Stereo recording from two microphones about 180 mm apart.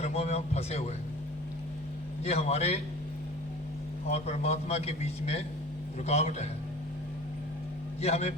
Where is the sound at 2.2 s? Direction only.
35° left (ahead or behind).